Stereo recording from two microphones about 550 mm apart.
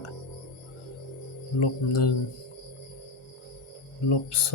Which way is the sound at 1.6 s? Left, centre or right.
Left.